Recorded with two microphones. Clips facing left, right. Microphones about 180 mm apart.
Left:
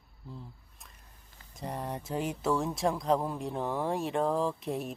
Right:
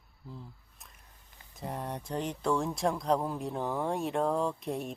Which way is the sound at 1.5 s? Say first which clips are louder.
Left 1 dB; centre (ahead or behind).